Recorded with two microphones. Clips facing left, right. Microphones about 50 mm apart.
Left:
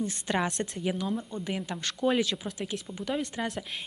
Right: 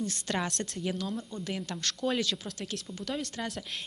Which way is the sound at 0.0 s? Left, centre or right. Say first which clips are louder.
Left 3 dB; centre.